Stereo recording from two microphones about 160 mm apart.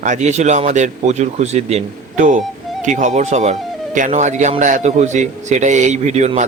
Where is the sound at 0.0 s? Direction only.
50° right (ahead or behind).